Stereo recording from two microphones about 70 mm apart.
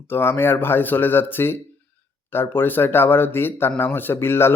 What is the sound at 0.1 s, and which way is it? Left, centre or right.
Speech, left.